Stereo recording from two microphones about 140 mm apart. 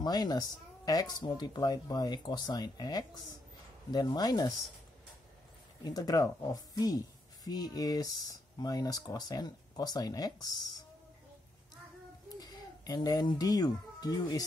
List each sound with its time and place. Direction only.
0.0 s a woman's voice: 30° left (ahead or behind)
5.9 s a woman's voice: 25° left (ahead or behind)
12.4 s speech: 30° left (ahead or behind)